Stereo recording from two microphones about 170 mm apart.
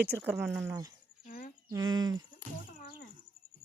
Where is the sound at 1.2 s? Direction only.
55° left (ahead or behind).